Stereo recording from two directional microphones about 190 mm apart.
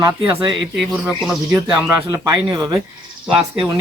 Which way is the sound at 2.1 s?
20° right (ahead or behind).